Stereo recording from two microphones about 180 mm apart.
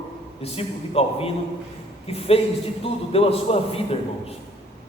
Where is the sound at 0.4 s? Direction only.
35° left (ahead or behind).